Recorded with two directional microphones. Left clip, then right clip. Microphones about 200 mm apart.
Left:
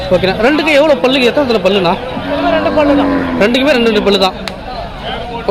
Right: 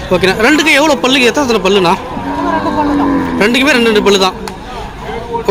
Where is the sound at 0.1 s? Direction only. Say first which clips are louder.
Right 2 dB; 5° right (ahead or behind).